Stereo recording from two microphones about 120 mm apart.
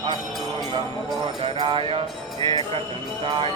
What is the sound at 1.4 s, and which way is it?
Speech, 45° right (ahead or behind).